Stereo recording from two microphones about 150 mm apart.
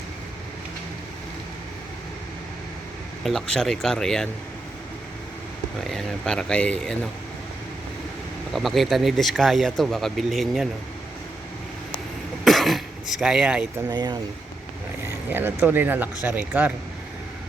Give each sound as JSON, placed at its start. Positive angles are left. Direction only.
{"t": 3.2, "sound": "speech", "side_deg": 0}
{"t": 5.8, "sound": "speech", "side_deg": 0}
{"t": 8.5, "sound": "speech", "side_deg": 0}
{"t": 12.5, "sound": "throat clearing", "side_deg": 0}
{"t": 13.9, "sound": "speech", "side_deg": -30}
{"t": 15.0, "sound": "speech", "side_deg": -15}